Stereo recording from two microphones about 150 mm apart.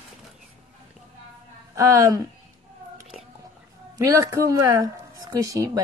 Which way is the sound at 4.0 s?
20° right (ahead or behind).